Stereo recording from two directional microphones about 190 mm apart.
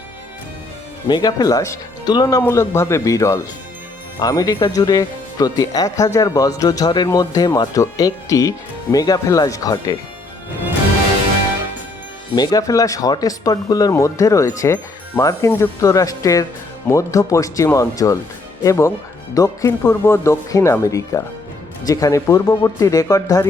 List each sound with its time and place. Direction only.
1.0 s speech: 20° left (ahead or behind)
12.3 s speech: 20° left (ahead or behind)